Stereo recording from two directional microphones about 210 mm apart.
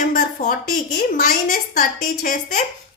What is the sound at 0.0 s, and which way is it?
A woman's voice, 40° left (ahead or behind).